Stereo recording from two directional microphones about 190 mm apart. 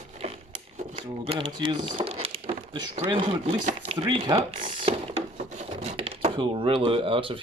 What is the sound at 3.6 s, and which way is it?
Chopping, 40° right (ahead or behind).